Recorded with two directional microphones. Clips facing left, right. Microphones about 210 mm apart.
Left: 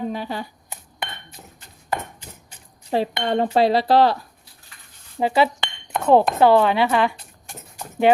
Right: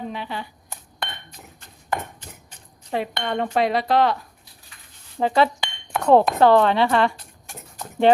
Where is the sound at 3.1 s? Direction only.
30° left (ahead or behind).